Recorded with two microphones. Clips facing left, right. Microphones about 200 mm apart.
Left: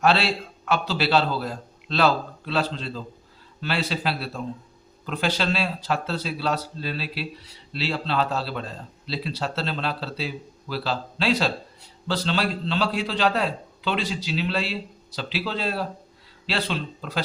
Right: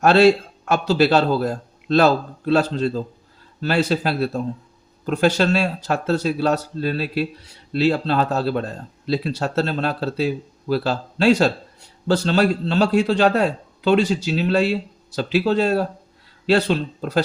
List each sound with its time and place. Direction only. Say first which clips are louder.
0.0 s speech: right 9 dB; 45° right (ahead or behind)